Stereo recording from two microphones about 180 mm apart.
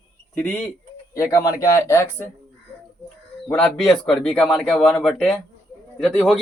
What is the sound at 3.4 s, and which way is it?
Speech, 5° left (ahead or behind).